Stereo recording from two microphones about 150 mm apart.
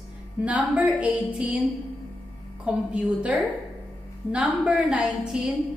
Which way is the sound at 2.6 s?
10° right (ahead or behind).